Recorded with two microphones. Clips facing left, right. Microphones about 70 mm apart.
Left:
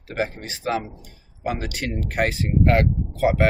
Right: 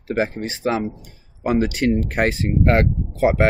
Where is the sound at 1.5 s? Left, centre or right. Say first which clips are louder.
Right 9 dB; right.